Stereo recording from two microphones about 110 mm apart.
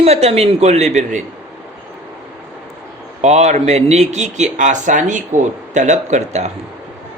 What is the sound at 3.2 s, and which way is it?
Speech, 90° right.